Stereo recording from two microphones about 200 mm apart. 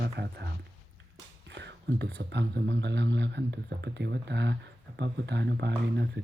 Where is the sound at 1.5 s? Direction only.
60° right (ahead or behind).